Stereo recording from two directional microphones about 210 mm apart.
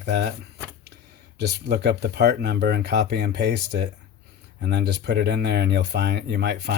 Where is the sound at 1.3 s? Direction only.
50° right (ahead or behind).